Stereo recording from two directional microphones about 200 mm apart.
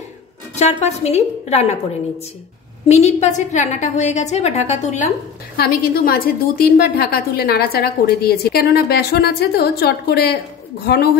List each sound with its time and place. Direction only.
0.6 s a woman's voice: 35° left (ahead or behind)
2.9 s a woman's voice: 35° left (ahead or behind)
5.6 s a woman's voice: 50° left (ahead or behind)